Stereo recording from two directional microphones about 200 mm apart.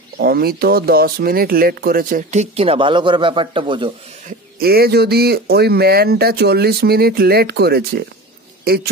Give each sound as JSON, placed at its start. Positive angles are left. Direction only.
{"t": 0.2, "sound": "speech", "side_deg": -50}
{"t": 4.6, "sound": "speech", "side_deg": -50}